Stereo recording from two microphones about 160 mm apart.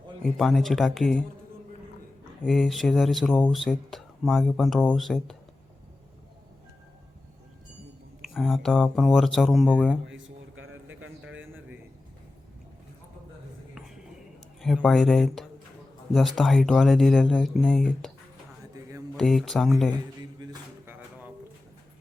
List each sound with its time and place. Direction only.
0.3 s speech: centre (ahead or behind)
2.4 s speech: 5° left (ahead or behind)
8.2 s speech: centre (ahead or behind)
11.2 s a sound: 10° right (ahead or behind)
14.6 s speech: centre (ahead or behind)
18.7 s a sound: 20° right (ahead or behind)
19.1 s speech: centre (ahead or behind)